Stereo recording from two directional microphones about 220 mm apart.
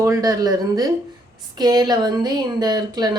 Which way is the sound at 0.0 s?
15° right (ahead or behind).